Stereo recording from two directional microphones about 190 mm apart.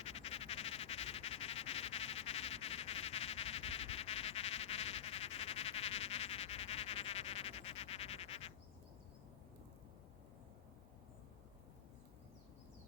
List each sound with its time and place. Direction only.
0.0 s frog: 30° left (ahead or behind)